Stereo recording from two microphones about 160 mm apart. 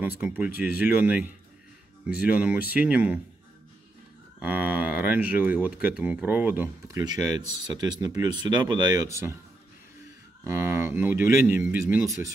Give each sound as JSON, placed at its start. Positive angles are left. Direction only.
{"t": 0.2, "sound": "speech", "side_deg": -10}
{"t": 4.4, "sound": "speech", "side_deg": -10}
{"t": 10.4, "sound": "speech", "side_deg": -15}